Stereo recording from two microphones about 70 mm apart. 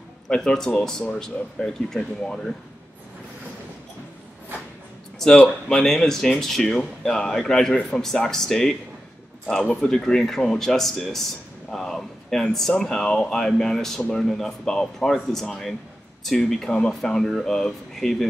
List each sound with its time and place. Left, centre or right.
0.3 s speech: centre
5.4 s speech: centre
9.8 s speech: centre